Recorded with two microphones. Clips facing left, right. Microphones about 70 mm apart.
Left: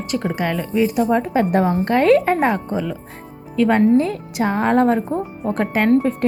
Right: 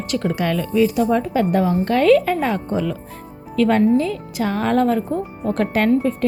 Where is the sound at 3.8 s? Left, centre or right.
Left.